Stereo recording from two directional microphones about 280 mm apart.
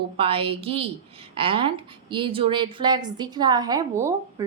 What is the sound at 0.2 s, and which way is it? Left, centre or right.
A woman's voice, centre.